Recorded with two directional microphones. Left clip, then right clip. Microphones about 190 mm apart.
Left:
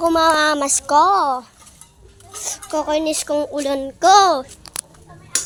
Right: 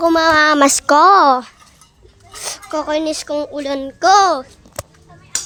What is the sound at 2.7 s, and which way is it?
Speech, 15° right (ahead or behind).